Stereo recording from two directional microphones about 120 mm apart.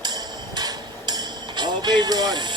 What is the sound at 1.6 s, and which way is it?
Speech, 40° right (ahead or behind).